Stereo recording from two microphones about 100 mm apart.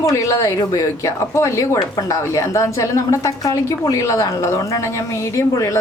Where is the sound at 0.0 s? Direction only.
35° left (ahead or behind).